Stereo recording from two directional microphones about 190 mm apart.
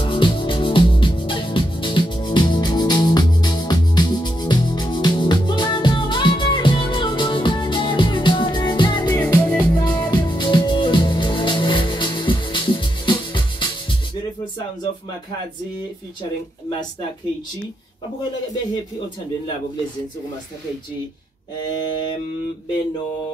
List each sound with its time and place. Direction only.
0.0 s music: 25° left (ahead or behind); by 9.7 s 10° left (ahead or behind)
9.8 s music: 20° left (ahead or behind)